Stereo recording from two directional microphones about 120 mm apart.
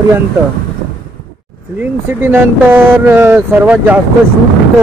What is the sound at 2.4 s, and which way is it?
Speech, 15° right (ahead or behind).